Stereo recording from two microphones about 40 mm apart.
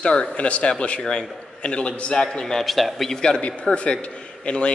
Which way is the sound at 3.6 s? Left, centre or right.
Left.